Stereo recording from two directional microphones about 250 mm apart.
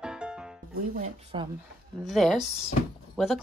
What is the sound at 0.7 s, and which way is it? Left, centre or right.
Music, right.